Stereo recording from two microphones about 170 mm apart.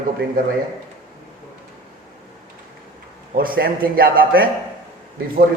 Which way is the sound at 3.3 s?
60° right (ahead or behind).